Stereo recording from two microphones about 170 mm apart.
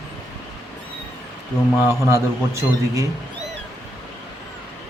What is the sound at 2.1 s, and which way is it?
Speech, 15° right (ahead or behind).